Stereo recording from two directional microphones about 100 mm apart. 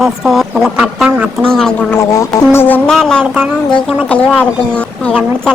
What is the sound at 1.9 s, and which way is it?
Speech, 30° left (ahead or behind).